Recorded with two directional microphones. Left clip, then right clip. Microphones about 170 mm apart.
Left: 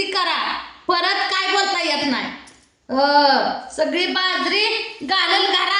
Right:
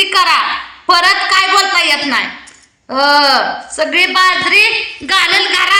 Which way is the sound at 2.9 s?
20° left (ahead or behind).